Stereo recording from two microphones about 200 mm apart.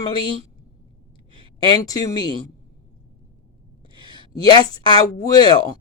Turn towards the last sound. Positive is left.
turn(degrees=20)  # may be behind; listen again after turning